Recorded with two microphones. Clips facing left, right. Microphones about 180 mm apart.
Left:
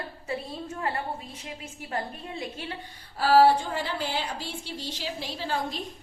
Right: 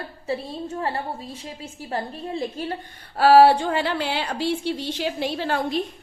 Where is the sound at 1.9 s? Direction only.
35° right (ahead or behind).